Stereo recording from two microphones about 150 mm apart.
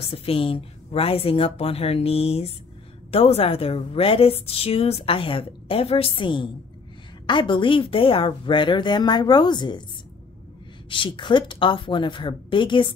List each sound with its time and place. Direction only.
0.0 s a woman's voice: 40° left (ahead or behind)
10.9 s a woman's voice: 35° left (ahead or behind)